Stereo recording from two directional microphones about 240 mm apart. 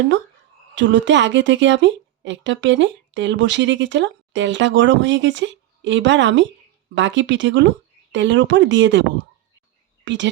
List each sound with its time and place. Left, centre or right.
0.8 s a woman's voice: right